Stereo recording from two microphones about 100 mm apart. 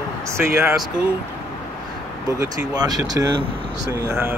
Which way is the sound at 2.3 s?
40° right (ahead or behind).